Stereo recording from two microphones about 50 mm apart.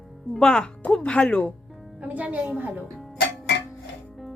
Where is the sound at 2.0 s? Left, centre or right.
Right.